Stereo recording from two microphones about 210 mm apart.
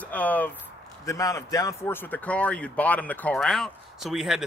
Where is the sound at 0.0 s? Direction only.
5° left (ahead or behind).